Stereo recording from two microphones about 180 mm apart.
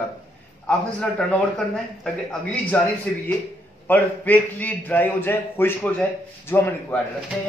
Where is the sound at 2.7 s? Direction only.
10° left (ahead or behind).